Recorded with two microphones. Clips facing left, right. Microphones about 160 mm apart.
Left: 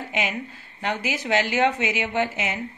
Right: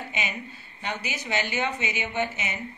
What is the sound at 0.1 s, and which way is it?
A woman's voice, 90° left.